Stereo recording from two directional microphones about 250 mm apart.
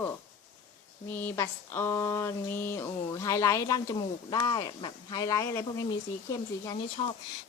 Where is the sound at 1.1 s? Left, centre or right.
Centre.